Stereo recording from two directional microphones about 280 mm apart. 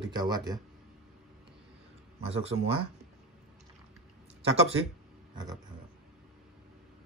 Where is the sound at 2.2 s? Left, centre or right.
Right.